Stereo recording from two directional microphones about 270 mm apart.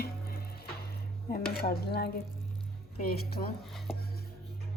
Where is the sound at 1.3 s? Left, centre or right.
Left.